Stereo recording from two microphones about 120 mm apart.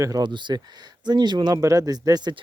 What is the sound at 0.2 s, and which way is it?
Speech, 40° right (ahead or behind).